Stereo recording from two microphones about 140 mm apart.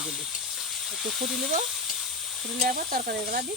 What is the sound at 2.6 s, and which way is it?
Speech, 75° right (ahead or behind).